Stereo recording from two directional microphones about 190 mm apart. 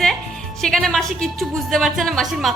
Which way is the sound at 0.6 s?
Centre (ahead or behind).